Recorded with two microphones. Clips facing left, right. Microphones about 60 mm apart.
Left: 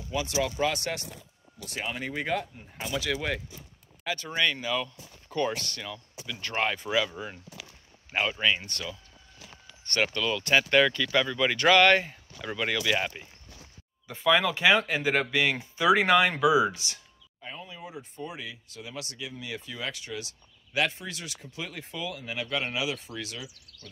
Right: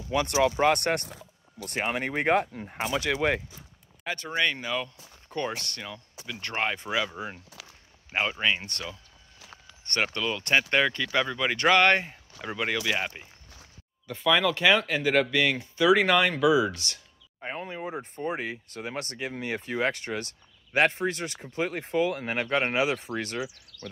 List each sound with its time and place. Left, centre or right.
0.1 s speech: right
3.1 s speech: right
5.5 s speech: right
8.1 s speech: right
10.0 s speech: right
12.4 s speech: centre
14.2 s speech: centre
17.4 s speech: right